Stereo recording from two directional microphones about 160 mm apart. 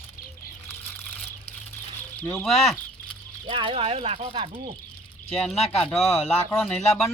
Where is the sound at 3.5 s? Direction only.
35° right (ahead or behind).